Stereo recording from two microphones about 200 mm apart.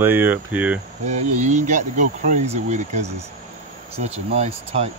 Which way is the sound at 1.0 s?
35° right (ahead or behind).